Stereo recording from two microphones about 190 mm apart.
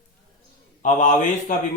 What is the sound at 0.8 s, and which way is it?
Speech, 40° left (ahead or behind).